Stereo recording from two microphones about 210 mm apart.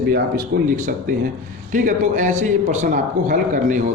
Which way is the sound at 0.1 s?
40° right (ahead or behind).